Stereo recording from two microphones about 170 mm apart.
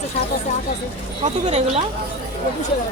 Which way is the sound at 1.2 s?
40° right (ahead or behind).